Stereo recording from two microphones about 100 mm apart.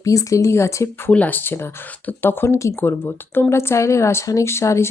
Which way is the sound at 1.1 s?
15° left (ahead or behind).